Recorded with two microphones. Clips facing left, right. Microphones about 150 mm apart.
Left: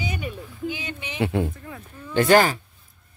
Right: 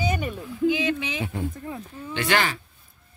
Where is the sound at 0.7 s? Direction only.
90° right.